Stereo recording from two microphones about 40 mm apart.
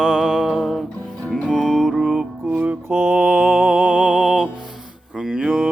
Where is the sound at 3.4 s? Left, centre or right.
Right.